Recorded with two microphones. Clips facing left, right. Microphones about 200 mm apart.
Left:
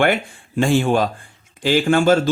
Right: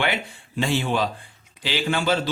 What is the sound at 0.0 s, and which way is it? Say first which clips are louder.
Speech: left 8 dB; 50° left (ahead or behind).